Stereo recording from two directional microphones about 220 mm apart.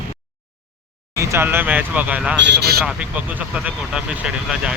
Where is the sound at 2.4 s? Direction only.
50° right (ahead or behind).